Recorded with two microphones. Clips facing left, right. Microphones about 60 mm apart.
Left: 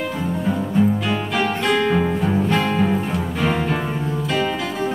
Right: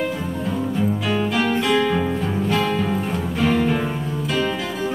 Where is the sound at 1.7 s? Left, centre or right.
Centre.